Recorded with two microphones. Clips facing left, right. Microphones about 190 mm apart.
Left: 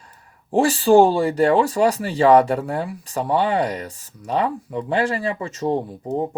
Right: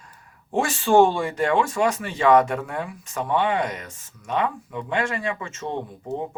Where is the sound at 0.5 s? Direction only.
35° left (ahead or behind).